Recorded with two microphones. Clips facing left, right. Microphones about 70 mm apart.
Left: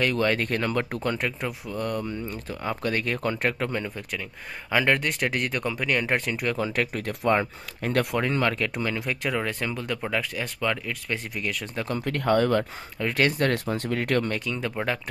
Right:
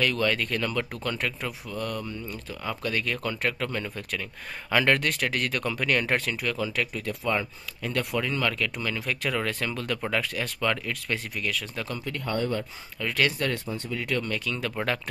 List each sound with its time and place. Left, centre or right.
0.0 s speech: left
1.1 s speech: centre
1.7 s speech: left; by 6.3 s centre
6.4 s speech: left
8.2 s speech: left; by 11.4 s centre
11.6 s speech: left
12.0 s speech: left
13.0 s speech: left
13.4 s speech: left
14.4 s speech: left